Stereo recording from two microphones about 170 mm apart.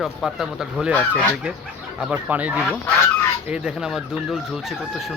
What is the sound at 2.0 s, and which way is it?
Speech, 10° right (ahead or behind).